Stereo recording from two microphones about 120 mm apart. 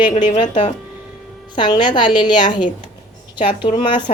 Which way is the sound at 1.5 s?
40° left (ahead or behind).